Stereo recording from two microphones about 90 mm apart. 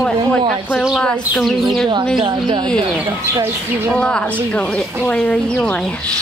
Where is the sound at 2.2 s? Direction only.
60° right (ahead or behind).